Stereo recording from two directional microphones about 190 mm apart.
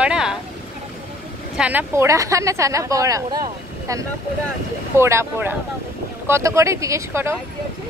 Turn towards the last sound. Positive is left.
turn(degrees=-15)  # may be behind; listen again after turning